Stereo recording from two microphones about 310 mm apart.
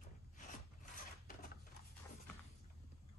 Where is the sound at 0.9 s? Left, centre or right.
Left.